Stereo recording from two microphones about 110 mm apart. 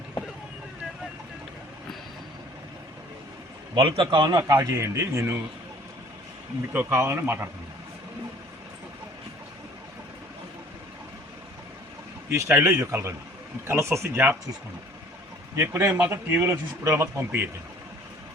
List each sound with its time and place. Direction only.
3.8 s a man's voice: 50° right (ahead or behind); by 5.4 s 25° right (ahead or behind)
6.7 s speech: 20° right (ahead or behind)
12.3 s speech: 25° right (ahead or behind)
15.5 s speech: 20° right (ahead or behind)